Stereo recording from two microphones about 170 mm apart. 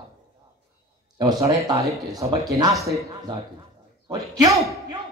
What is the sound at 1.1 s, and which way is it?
A man's voice, 25° right (ahead or behind).